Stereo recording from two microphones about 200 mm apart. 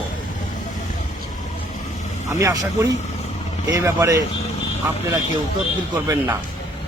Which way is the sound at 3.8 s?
15° right (ahead or behind).